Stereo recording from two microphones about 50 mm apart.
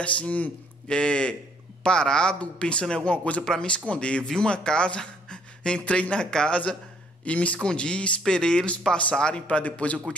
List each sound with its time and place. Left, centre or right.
0.0 s speech: left
0.8 s a man's voice: centre